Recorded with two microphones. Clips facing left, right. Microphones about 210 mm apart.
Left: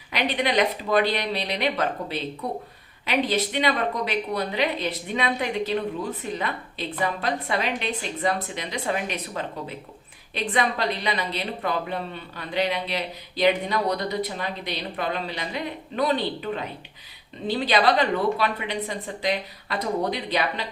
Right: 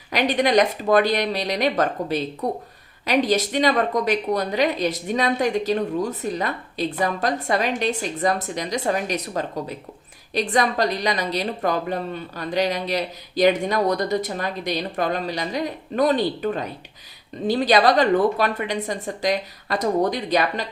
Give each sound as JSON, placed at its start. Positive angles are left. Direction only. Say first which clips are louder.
{"t": 0.1, "sound": "a woman's voice", "louder": "right 5 dB", "side_deg": -45}